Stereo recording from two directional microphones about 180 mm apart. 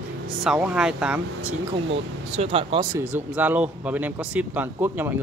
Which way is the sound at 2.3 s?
35° right (ahead or behind).